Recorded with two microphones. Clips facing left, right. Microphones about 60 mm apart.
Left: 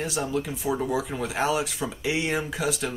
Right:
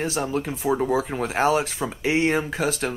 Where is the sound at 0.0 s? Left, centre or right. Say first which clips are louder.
Right 3 dB; right.